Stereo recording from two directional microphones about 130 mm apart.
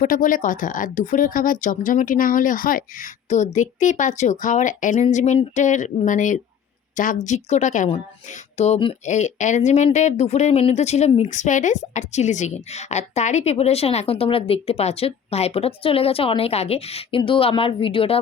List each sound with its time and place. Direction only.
0.0 s speech: 90° left; by 5.0 s 75° left (ahead or behind)
5.1 s speech: 60° left (ahead or behind)
8.3 s music: 60° left (ahead or behind)
9.0 s a woman's voice: 65° left (ahead or behind); by 18.2 s 45° left (ahead or behind)